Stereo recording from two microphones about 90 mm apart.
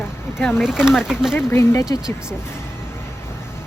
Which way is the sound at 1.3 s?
25° left (ahead or behind).